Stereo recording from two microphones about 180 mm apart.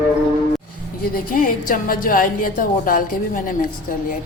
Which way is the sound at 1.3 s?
50° left (ahead or behind).